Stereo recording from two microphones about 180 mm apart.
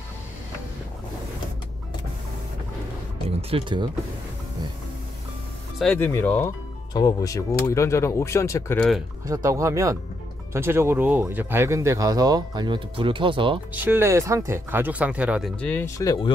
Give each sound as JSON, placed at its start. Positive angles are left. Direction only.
{"t": 3.3, "sound": "speech", "side_deg": -30}
{"t": 5.9, "sound": "speech", "side_deg": 15}
{"t": 8.7, "sound": "speech", "side_deg": 0}
{"t": 9.2, "sound": "speech", "side_deg": -20}
{"t": 13.7, "sound": "speech", "side_deg": -10}
{"t": 15.6, "sound": "speech", "side_deg": 10}